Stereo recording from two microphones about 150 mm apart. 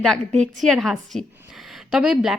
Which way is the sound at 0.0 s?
Centre (ahead or behind).